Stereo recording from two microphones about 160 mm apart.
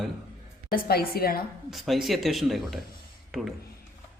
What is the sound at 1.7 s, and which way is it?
Speech, centre (ahead or behind).